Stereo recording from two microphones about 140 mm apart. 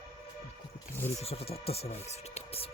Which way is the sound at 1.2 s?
45° left (ahead or behind).